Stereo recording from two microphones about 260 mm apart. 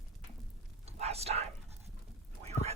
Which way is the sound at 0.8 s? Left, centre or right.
Right.